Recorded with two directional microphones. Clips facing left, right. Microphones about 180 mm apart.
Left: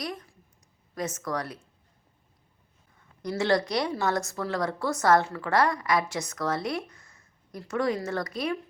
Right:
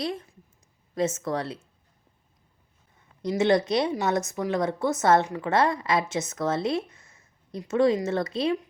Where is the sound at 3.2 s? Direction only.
20° right (ahead or behind).